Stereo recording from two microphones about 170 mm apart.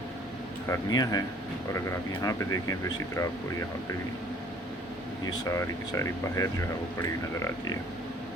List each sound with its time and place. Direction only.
0.7 s speech: 20° left (ahead or behind)
2.2 s speech: 20° left (ahead or behind)
5.3 s speech: 20° left (ahead or behind)